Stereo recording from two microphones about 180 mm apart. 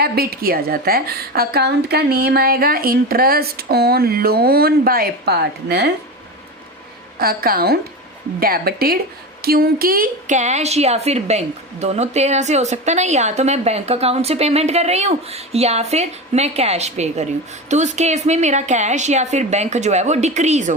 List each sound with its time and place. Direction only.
0.0 s a woman's voice: 60° right (ahead or behind)
7.2 s a woman's voice: 55° right (ahead or behind)